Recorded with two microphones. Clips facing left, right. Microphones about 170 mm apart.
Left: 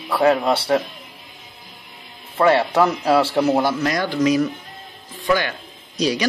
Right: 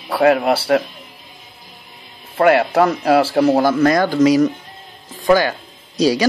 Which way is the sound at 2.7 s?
30° right (ahead or behind).